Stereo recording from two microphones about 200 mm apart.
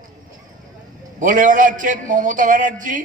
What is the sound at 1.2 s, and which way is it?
A man's voice, 40° right (ahead or behind).